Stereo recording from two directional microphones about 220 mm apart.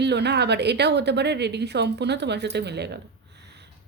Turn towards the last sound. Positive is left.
turn(degrees=-50)  # may be behind; listen again after turning